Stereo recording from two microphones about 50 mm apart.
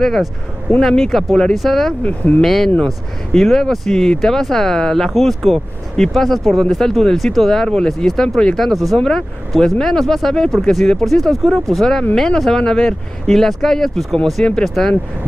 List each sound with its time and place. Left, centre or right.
0.7 s speech: centre
2.0 s speech: left
2.4 s speech: centre